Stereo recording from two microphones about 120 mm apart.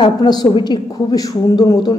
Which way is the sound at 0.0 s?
35° left (ahead or behind).